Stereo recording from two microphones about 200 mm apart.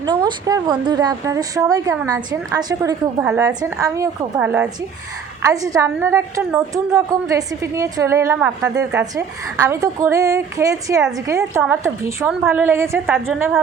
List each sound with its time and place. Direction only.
0.0 s a woman's voice: 15° right (ahead or behind)